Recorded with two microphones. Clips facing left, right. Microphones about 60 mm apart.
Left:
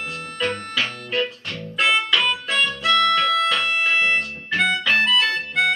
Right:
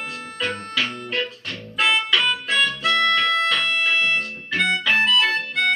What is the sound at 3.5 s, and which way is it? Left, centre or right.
Music, centre.